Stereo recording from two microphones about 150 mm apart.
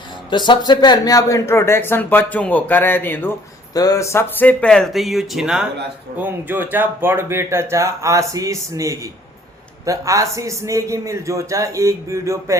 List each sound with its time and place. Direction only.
0.3 s a man's voice: 30° left (ahead or behind); by 12.5 s 20° right (ahead or behind)